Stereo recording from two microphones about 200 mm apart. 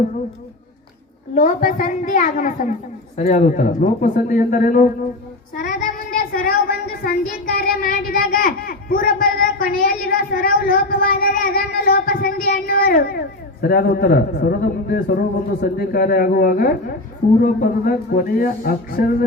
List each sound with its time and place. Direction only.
1.4 s speech: 45° left (ahead or behind)